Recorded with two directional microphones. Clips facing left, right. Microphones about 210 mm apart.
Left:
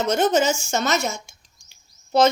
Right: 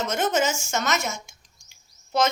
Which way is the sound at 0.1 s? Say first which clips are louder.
Left 6 dB; 30° left (ahead or behind).